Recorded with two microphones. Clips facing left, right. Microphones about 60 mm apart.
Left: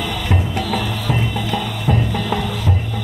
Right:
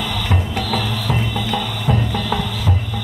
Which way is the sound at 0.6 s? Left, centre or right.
Centre.